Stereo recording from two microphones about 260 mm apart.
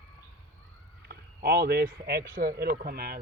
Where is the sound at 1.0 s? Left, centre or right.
Right.